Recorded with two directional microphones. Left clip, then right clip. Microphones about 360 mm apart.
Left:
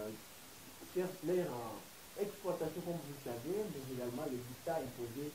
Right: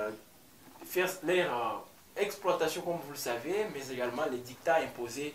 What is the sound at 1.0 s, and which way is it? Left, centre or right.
A man's voice, centre.